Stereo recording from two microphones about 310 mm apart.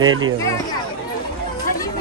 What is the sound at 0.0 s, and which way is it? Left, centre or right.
Speech, right.